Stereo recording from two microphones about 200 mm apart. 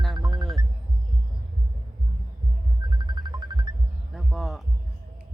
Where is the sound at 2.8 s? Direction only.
20° right (ahead or behind).